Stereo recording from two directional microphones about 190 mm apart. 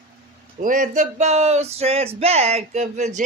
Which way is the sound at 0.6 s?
45° right (ahead or behind).